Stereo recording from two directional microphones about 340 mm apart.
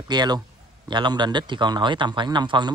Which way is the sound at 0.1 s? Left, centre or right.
Centre.